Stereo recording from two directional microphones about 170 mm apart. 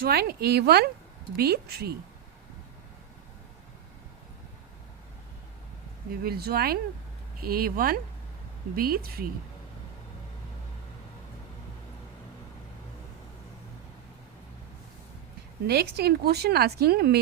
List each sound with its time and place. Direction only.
0.0 s speech: 65° right (ahead or behind)
6.2 s speech: 65° right (ahead or behind)
15.6 s speech: 70° right (ahead or behind)